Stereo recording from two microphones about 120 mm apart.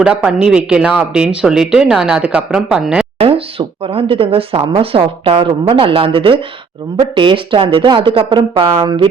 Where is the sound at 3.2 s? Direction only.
50° right (ahead or behind).